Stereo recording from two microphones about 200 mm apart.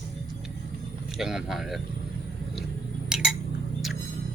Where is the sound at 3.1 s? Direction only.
5° right (ahead or behind).